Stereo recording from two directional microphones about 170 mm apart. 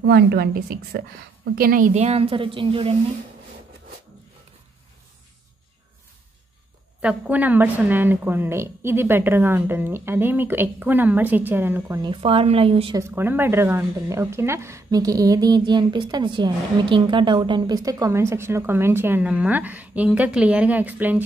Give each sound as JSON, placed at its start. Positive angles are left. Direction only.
{"t": 0.0, "sound": "a woman's voice", "side_deg": -70}
{"t": 2.0, "sound": "speech", "side_deg": -35}
{"t": 7.0, "sound": "speech", "side_deg": -5}
{"t": 12.0, "sound": "speech", "side_deg": -30}
{"t": 12.9, "sound": "speech", "side_deg": -15}